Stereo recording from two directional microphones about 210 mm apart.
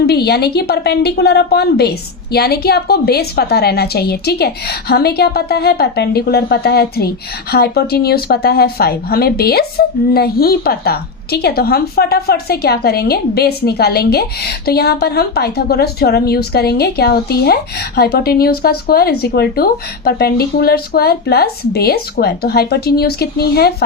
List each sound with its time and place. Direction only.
0.0 s speech: 50° left (ahead or behind)